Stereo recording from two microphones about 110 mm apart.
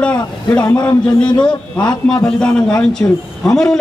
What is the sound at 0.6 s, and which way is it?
Speech, 40° left (ahead or behind).